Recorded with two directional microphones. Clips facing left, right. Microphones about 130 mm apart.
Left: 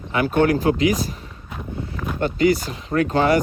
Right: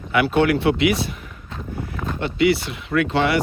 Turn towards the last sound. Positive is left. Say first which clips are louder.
# left 2 dB
turn(degrees=40)  # may be behind; listen again after turning